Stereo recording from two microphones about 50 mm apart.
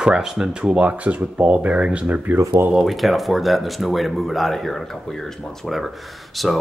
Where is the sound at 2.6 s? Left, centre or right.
Right.